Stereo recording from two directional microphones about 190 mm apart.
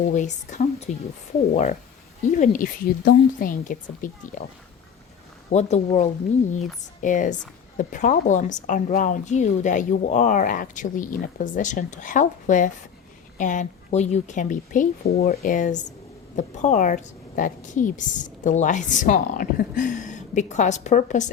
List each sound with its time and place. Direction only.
0.1 s a woman's voice: 40° left (ahead or behind)
5.5 s a woman's voice: 35° left (ahead or behind)